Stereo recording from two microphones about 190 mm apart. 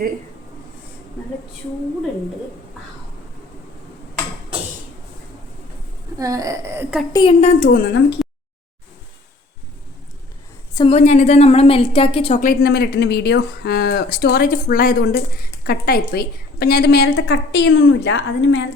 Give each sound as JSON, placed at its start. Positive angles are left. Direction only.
{"t": 6.1, "sound": "speech", "side_deg": -20}
{"t": 7.1, "sound": "a woman's voice", "side_deg": 25}
{"t": 7.4, "sound": "a woman's voice", "side_deg": 45}
{"t": 8.2, "sound": "a sound", "side_deg": 0}
{"t": 10.8, "sound": "a woman's voice", "side_deg": 30}
{"t": 12.4, "sound": "a woman's voice", "side_deg": 50}